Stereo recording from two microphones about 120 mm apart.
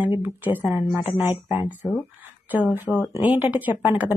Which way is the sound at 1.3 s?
40° left (ahead or behind).